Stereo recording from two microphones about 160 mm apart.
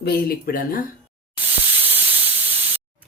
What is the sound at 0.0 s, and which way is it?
Speech, 75° left (ahead or behind).